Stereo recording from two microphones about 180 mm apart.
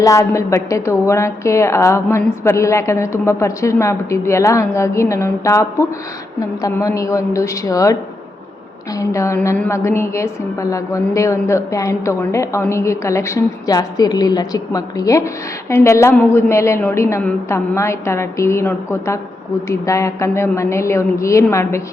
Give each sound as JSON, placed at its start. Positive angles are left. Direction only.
{"t": 0.0, "sound": "a woman's voice", "side_deg": 15}
{"t": 9.0, "sound": "a woman's voice", "side_deg": 15}